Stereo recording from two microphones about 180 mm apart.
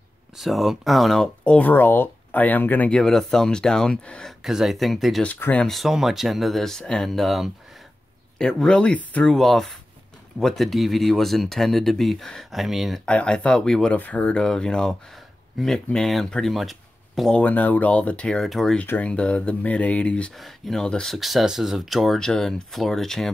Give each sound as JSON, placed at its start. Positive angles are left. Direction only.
{"t": 0.4, "sound": "speech", "side_deg": 0}